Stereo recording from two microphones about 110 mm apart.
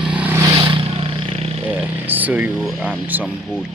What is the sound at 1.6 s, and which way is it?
Speech, 15° right (ahead or behind).